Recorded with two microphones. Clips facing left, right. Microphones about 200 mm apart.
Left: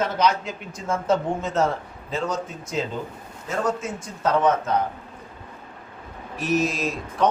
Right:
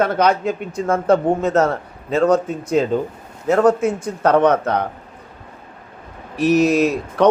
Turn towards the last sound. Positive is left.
turn(degrees=-70)  # may be behind; listen again after turning